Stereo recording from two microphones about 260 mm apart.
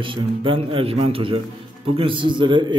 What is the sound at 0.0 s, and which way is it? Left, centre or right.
A man's voice, centre.